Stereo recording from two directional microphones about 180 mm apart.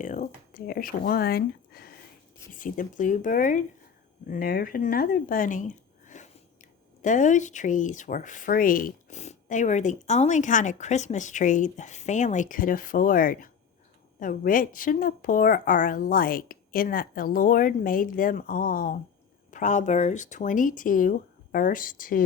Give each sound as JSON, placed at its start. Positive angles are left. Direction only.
{"t": 0.0, "sound": "a sound", "side_deg": 45}
{"t": 0.5, "sound": "speech", "side_deg": 50}
{"t": 2.5, "sound": "speech", "side_deg": 45}